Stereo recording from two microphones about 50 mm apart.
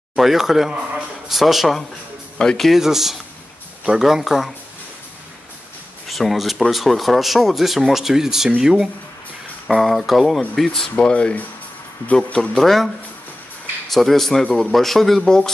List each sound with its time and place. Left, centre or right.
0.1 s a man's voice: centre
2.3 s speech: centre
2.6 s speech: centre
6.0 s a man's voice: centre
11.0 s speech: left
12.5 s speech: centre